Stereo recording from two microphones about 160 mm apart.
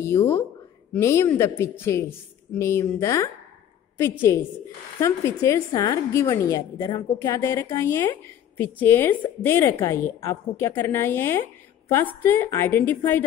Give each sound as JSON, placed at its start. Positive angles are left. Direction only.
{"t": 0.0, "sound": "a woman's voice", "side_deg": 15}